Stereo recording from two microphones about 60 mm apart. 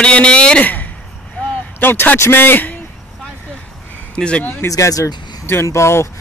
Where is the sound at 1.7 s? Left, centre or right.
Left.